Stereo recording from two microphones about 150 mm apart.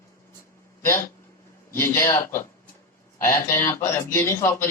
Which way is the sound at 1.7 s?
15° left (ahead or behind).